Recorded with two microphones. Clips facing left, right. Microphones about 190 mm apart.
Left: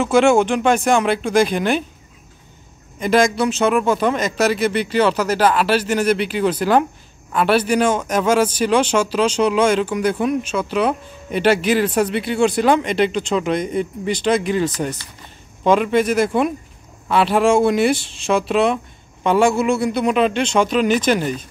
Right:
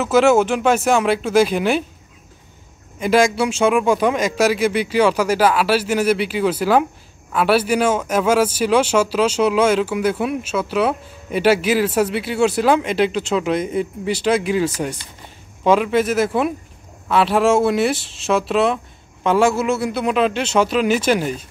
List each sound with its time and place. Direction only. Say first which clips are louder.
0.0 s speech: even; 5° right (ahead or behind)
3.0 s speech: even; 10° right (ahead or behind)